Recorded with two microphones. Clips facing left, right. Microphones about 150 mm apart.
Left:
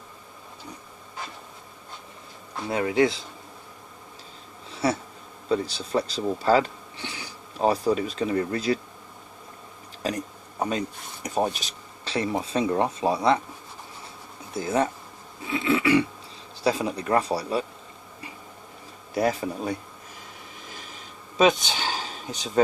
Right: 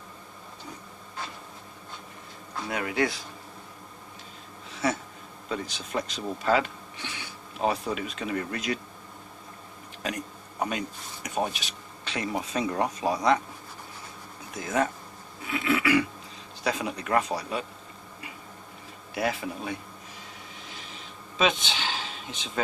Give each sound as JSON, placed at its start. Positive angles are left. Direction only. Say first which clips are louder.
{"t": 2.6, "sound": "speech", "louder": "left 6 dB", "side_deg": 30}
{"t": 4.8, "sound": "speech", "louder": "left 3 dB", "side_deg": 35}
{"t": 10.0, "sound": "speech", "louder": "left 4 dB", "side_deg": 30}
{"t": 14.5, "sound": "speech", "louder": "left 3 dB", "side_deg": 30}
{"t": 15.4, "sound": "a sound", "louder": "left 3 dB", "side_deg": 25}
{"t": 16.6, "sound": "speech", "louder": "left 5 dB", "side_deg": 30}
{"t": 19.1, "sound": "speech", "louder": "left 5 dB", "side_deg": 40}
{"t": 20.7, "sound": "a sound", "louder": "left 1 dB", "side_deg": 45}